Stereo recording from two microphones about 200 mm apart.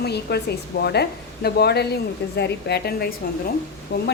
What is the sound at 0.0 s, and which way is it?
A woman's voice, 55° left (ahead or behind).